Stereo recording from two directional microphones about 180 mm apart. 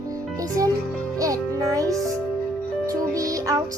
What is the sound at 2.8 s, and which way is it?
Music, 20° right (ahead or behind).